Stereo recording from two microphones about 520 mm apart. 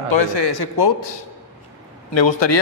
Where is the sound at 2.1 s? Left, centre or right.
Left.